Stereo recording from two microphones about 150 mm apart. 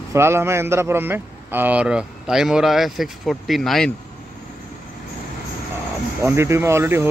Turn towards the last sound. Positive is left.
turn(degrees=-15)  # may be behind; listen again after turning